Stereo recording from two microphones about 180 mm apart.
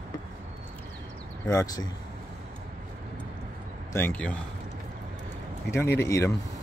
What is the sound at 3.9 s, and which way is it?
Speech, 10° left (ahead or behind).